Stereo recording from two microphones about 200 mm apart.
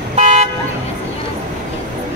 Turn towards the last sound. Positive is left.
turn(degrees=-35)  # may be behind; listen again after turning